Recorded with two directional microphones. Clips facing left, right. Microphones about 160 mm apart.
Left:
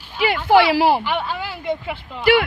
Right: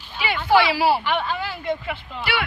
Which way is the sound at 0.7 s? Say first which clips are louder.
Left 3 dB; 50° left (ahead or behind).